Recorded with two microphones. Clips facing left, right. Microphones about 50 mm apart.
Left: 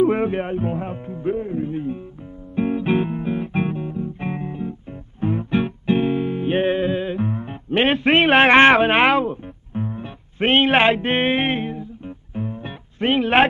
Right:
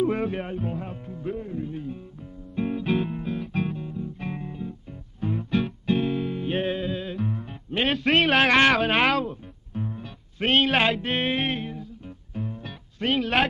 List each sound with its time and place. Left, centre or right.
0.0 s speech: left
2.5 s music: left
6.7 s music: left
7.9 s a man's voice: centre
8.4 s speech: left
8.9 s speech: centre
9.3 s music: left
11.0 s music: left